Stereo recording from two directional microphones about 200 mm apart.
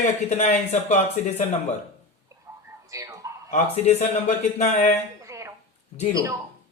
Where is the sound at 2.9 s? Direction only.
15° right (ahead or behind).